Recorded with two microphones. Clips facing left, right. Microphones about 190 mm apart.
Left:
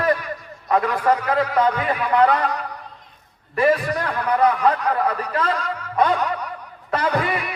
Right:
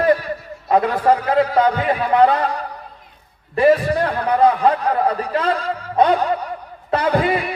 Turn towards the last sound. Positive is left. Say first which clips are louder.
# right 4 dB
turn(degrees=-30)  # may be behind; listen again after turning